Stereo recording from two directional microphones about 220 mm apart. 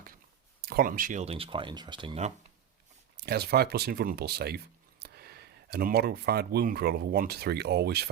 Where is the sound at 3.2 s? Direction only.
45° right (ahead or behind).